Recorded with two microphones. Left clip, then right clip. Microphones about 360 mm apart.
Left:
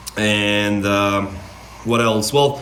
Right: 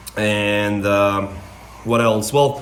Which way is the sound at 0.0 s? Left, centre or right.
Centre.